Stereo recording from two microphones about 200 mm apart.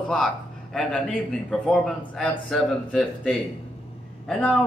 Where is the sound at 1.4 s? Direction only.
5° left (ahead or behind).